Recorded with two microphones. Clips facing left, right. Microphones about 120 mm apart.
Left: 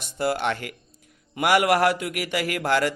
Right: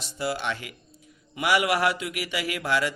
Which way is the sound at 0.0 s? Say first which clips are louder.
Left 5 dB; 55° left (ahead or behind).